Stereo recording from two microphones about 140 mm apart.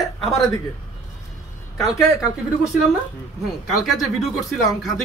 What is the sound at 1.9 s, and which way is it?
Speech, 20° left (ahead or behind).